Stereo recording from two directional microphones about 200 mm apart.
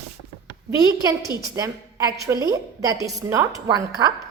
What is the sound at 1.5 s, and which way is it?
A woman's voice, 15° right (ahead or behind).